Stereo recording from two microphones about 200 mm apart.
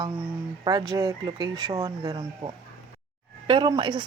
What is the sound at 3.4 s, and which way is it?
Speech, 25° right (ahead or behind).